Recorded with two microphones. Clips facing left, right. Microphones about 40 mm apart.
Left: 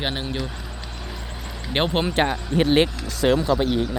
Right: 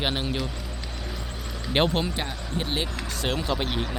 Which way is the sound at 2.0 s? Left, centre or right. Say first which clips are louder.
Left 10 dB; left.